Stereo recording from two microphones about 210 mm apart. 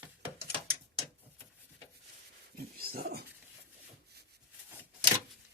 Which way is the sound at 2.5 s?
45° right (ahead or behind).